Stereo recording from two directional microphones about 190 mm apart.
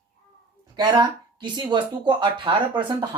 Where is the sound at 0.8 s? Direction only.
20° right (ahead or behind).